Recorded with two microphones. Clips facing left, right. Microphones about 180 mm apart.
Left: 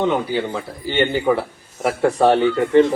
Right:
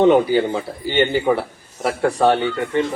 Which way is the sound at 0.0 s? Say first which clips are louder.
Right 6 dB; 20° right (ahead or behind).